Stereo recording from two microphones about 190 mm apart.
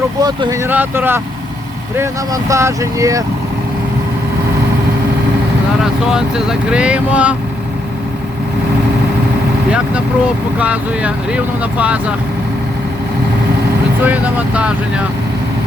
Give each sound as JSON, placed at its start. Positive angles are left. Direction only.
{"t": 0.2, "sound": "speech", "side_deg": -20}
{"t": 5.8, "sound": "speech", "side_deg": -5}
{"t": 10.6, "sound": "speech", "side_deg": -5}
{"t": 14.0, "sound": "speech", "side_deg": -10}